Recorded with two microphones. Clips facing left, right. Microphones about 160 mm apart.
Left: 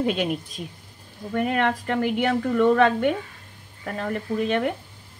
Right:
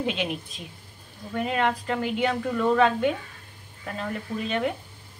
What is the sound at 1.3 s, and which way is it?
A woman's voice, 55° left (ahead or behind).